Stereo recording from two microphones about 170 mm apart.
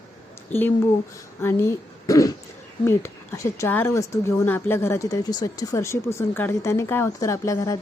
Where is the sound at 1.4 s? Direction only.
15° left (ahead or behind).